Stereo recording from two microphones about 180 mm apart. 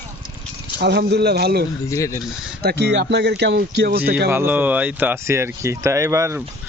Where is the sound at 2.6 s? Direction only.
65° right (ahead or behind).